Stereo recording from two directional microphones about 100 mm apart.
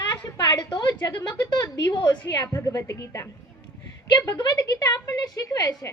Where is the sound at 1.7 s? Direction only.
45° left (ahead or behind).